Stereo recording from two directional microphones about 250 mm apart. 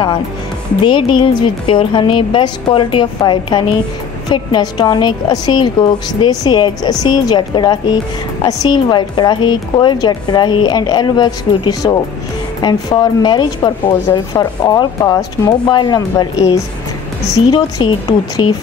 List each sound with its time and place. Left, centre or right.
0.8 s a woman's voice: centre